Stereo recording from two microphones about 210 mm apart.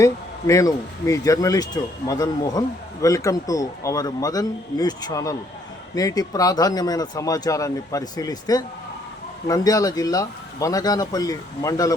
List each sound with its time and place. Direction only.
0.0 s speech: 15° left (ahead or behind)